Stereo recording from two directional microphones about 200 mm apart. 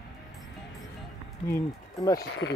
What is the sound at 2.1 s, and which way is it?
Speech, 60° left (ahead or behind).